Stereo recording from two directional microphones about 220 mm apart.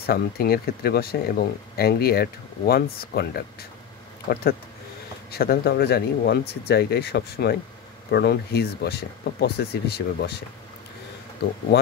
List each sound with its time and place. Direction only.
0.0 s speech: 45° left (ahead or behind)